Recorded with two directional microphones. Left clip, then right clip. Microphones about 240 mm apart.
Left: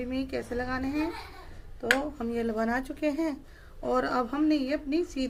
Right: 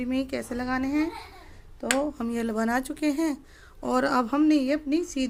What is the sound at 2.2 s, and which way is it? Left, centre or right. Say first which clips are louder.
Speech: right 1 dB; right.